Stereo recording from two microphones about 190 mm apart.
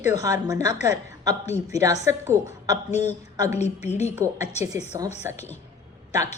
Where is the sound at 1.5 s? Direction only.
35° left (ahead or behind).